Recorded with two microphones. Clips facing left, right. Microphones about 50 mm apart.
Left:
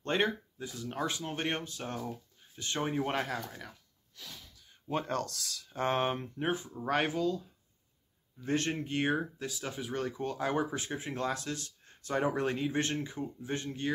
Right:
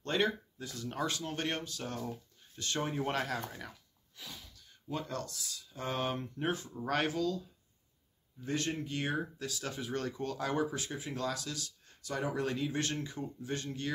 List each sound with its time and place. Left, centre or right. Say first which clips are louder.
0.0 s speech: left 1 dB; left
0.7 s speech: left 1 dB; centre
2.0 s a sound: left 1 dB; centre
2.6 s speech: left 2 dB; left
4.2 s a sound: even; centre
4.8 s speech: left 5 dB; left
5.8 s speech: left 6 dB; left
6.3 s speech: left 2 dB; centre
8.5 s speech: left 3 dB; left
9.1 s speech: left 3 dB; left